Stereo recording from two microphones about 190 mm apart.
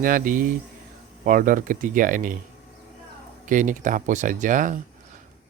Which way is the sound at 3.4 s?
45° right (ahead or behind).